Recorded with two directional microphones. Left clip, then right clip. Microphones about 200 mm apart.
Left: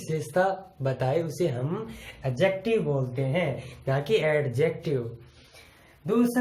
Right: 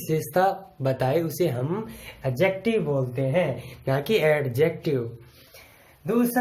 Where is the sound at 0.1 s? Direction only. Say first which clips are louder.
Right 3 dB; 45° right (ahead or behind).